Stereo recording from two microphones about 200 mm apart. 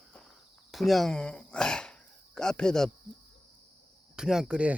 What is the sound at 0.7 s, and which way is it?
Speech, centre (ahead or behind).